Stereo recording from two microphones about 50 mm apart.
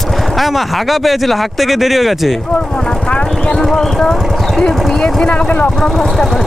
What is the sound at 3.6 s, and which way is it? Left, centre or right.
Speech, centre.